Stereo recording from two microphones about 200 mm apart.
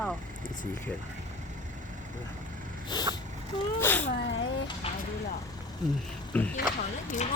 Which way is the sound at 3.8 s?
10° left (ahead or behind).